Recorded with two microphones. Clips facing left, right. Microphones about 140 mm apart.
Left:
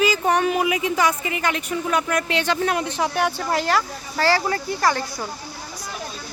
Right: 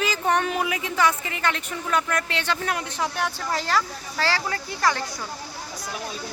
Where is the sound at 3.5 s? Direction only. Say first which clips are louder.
Left 3 dB; 60° left (ahead or behind).